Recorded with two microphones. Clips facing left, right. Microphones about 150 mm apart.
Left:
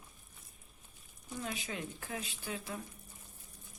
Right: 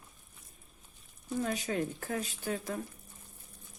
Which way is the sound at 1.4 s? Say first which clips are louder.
Right 8 dB; 45° right (ahead or behind).